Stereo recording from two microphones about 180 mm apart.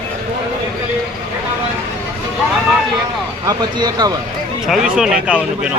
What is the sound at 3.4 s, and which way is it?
Speech, 20° right (ahead or behind).